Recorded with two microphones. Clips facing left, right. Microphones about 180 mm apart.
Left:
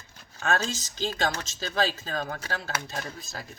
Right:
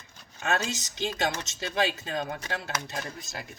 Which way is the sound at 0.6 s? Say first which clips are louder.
Left 1 dB; 15° right (ahead or behind).